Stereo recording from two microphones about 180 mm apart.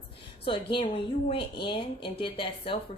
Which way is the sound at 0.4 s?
30° left (ahead or behind).